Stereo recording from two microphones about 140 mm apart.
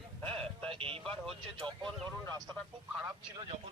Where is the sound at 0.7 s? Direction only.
40° right (ahead or behind).